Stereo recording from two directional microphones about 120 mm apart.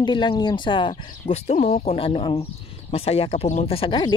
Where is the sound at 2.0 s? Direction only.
50° left (ahead or behind); by 3.7 s 70° left (ahead or behind).